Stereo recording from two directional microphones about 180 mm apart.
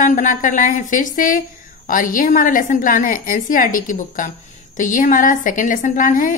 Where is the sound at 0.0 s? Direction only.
45° left (ahead or behind).